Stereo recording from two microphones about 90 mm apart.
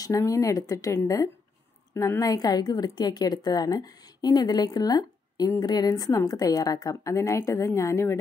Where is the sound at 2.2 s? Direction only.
45° left (ahead or behind).